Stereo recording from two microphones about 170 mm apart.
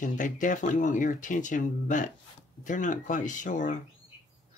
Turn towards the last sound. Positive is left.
turn(degrees=50)  # may be behind; listen again after turning